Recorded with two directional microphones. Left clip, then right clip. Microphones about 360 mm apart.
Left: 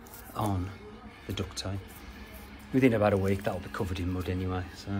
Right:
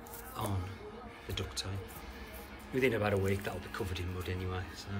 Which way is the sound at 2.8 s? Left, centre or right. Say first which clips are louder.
Left 6 dB; centre.